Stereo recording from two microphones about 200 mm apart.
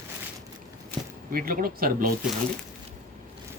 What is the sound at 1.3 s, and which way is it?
Speech, 45° right (ahead or behind).